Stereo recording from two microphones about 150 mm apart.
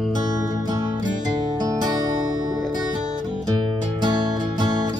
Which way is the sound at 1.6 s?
25° right (ahead or behind).